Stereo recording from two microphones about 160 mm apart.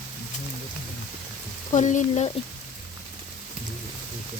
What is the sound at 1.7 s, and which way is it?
Speech, 50° left (ahead or behind).